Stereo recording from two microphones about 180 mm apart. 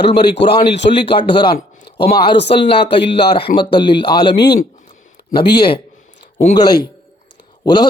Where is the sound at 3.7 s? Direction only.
25° left (ahead or behind).